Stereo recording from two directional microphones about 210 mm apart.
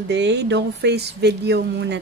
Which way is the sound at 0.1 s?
55° right (ahead or behind).